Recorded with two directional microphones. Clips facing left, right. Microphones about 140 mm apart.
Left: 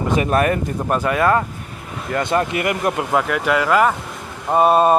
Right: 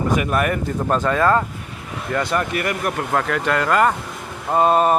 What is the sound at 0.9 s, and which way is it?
Speech, 10° left (ahead or behind).